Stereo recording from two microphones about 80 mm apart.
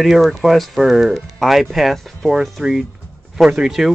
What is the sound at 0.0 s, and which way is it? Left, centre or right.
Speech, centre.